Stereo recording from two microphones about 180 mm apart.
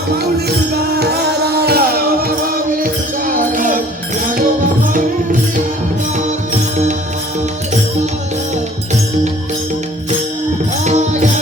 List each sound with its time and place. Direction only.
0.3 s music: 60° right (ahead or behind)
10.8 s music: 40° right (ahead or behind)